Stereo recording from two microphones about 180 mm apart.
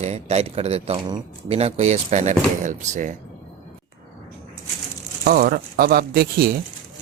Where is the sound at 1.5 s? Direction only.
35° right (ahead or behind).